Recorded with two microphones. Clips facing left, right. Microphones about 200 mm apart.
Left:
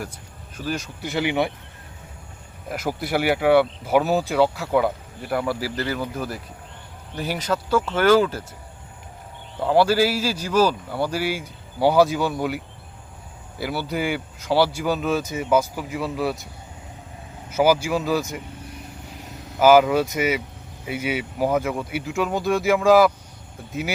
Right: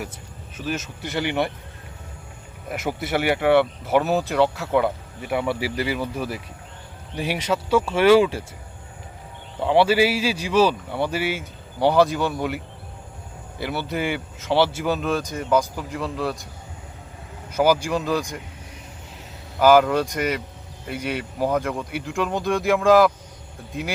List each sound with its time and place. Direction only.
0.5 s speech: 5° right (ahead or behind)
2.6 s speech: centre (ahead or behind)
9.6 s speech: centre (ahead or behind)
10.7 s speech: 5° left (ahead or behind)
17.5 s speech: 5° left (ahead or behind)
19.5 s speech: 5° left (ahead or behind)